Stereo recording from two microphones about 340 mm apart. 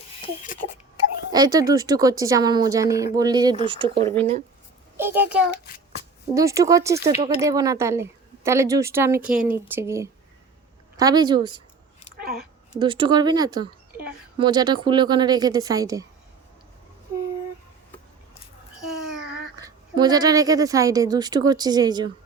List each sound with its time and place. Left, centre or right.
1.3 s a child's voice: centre
12.1 s a sound: right
12.7 s speech: centre
19.1 s a woman's voice: centre